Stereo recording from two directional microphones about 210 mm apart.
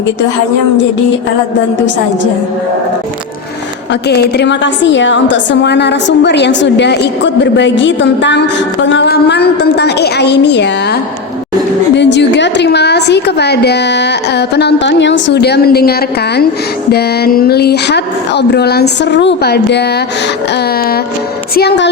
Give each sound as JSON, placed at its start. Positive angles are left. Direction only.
{"t": 4.1, "sound": "a woman's voice", "side_deg": 55}
{"t": 11.9, "sound": "a woman's voice", "side_deg": 55}
{"t": 21.5, "sound": "a woman's voice", "side_deg": 50}